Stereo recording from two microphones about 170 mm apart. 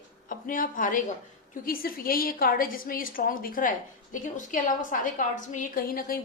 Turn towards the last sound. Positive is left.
turn(degrees=60)  # may be behind; listen again after turning